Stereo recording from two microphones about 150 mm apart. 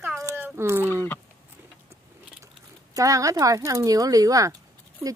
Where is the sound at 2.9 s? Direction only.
20° right (ahead or behind).